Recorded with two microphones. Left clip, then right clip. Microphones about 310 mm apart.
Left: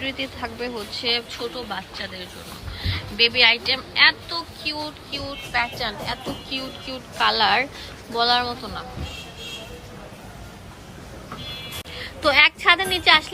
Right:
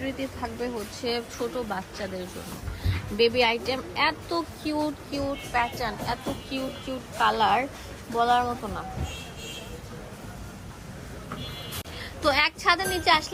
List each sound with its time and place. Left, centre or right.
0.0 s a woman's voice: centre
4.7 s a sound: centre
5.5 s a woman's voice: centre
11.9 s a woman's voice: centre